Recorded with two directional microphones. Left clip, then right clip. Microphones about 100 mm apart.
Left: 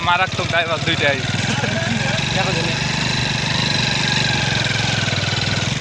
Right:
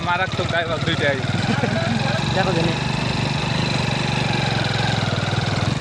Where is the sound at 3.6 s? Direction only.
Centre (ahead or behind).